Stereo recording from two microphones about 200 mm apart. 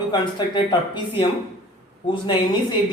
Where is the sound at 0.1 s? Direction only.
20° left (ahead or behind).